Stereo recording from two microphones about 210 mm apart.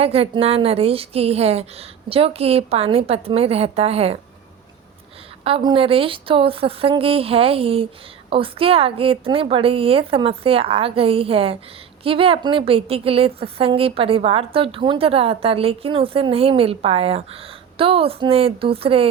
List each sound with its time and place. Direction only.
0.0 s a woman's voice: 30° right (ahead or behind)
5.4 s a woman's voice: 25° right (ahead or behind)